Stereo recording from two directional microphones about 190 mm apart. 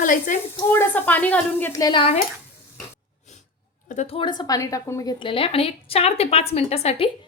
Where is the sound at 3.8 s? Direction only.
35° left (ahead or behind).